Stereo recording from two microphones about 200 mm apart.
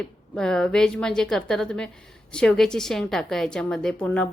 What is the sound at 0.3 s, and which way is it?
A woman's voice, 5° left (ahead or behind).